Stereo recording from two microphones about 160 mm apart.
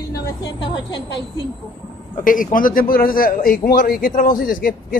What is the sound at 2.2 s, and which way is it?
A man's voice, 60° left (ahead or behind).